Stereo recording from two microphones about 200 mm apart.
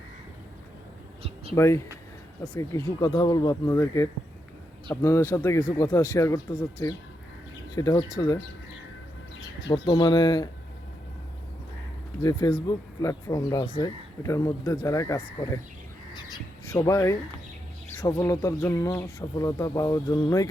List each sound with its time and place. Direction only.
1.5 s speech: 15° left (ahead or behind)
9.6 s speech: 15° left (ahead or behind)
12.2 s speech: 15° left (ahead or behind)
16.1 s bird: 20° left (ahead or behind)
17.9 s speech: 15° left (ahead or behind)